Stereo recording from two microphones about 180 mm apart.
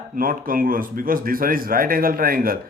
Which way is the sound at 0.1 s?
50° right (ahead or behind).